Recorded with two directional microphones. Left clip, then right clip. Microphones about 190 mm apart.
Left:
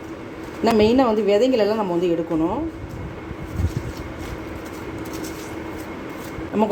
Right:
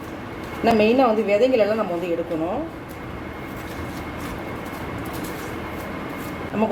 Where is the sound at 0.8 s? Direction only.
50° left (ahead or behind).